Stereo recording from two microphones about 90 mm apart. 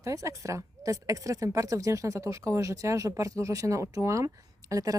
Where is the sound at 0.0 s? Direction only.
35° right (ahead or behind).